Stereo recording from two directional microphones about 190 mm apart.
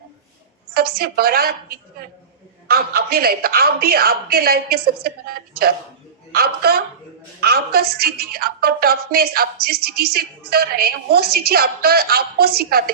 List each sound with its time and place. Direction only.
0.7 s a woman's voice: 55° right (ahead or behind)
2.6 s a woman's voice: 55° right (ahead or behind)